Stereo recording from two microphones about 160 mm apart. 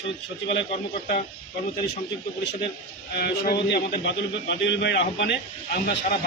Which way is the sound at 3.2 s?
80° left.